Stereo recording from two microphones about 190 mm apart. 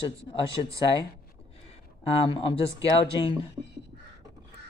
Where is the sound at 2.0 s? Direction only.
30° left (ahead or behind).